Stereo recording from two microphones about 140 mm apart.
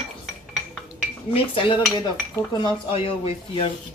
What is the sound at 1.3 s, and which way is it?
Speech, 40° left (ahead or behind).